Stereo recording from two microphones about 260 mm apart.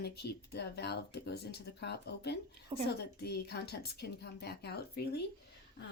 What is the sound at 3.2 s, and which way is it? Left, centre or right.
Speech, left.